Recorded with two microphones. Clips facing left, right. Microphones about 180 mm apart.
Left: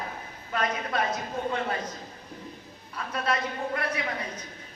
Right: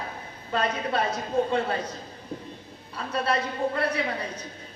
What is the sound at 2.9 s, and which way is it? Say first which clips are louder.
A man's voice: right 3 dB; 30° right (ahead or behind).